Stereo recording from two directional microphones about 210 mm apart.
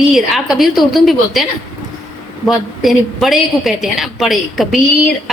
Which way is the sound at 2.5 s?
Centre (ahead or behind).